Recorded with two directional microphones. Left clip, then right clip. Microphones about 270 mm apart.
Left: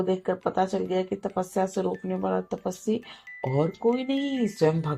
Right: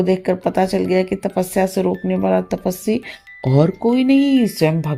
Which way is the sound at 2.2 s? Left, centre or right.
Right.